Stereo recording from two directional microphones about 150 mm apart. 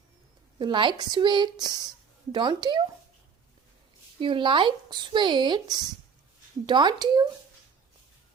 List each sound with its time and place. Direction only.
0.6 s speech: 30° right (ahead or behind)
4.2 s speech: 35° right (ahead or behind)